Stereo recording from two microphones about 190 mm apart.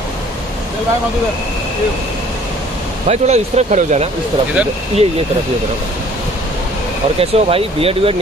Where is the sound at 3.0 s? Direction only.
35° right (ahead or behind).